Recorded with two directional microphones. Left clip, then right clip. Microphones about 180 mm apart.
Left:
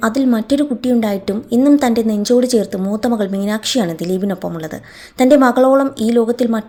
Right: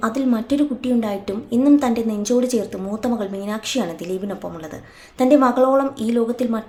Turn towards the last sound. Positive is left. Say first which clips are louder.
# left 6 dB
turn(degrees=30)  # may be behind; listen again after turning